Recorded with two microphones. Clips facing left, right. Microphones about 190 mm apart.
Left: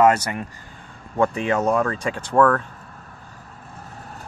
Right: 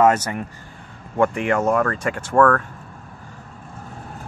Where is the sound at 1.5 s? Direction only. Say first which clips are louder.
Right 1 dB; 5° right (ahead or behind).